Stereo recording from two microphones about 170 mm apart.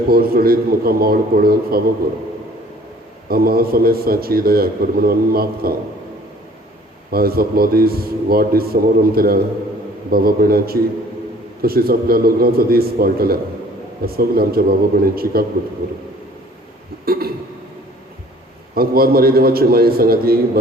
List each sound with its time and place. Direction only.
0.1 s a man's voice: 60° right (ahead or behind)
3.2 s a man's voice: 65° right (ahead or behind)
7.1 s a man's voice: 60° right (ahead or behind)
17.1 s a man's voice: 60° right (ahead or behind)
18.7 s a man's voice: 60° right (ahead or behind)